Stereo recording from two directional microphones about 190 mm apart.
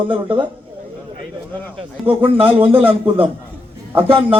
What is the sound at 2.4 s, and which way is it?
Speech, 30° right (ahead or behind).